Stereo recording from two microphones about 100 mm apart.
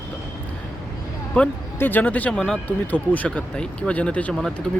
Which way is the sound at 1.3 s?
15° left (ahead or behind).